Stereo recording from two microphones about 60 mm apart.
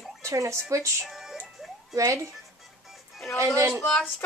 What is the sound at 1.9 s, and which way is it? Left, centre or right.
Speech, right.